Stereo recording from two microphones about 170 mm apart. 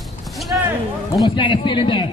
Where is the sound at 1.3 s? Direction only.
30° left (ahead or behind).